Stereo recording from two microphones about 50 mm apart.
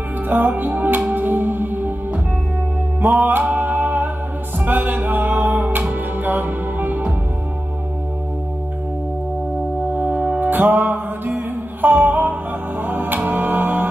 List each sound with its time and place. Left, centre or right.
0.3 s music: right
3.2 s music: right
9.9 s music: right